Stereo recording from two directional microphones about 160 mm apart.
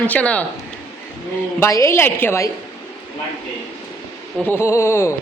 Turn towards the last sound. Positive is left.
turn(degrees=15)  # may be behind; listen again after turning